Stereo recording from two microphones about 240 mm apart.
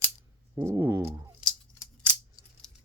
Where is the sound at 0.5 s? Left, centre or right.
Centre.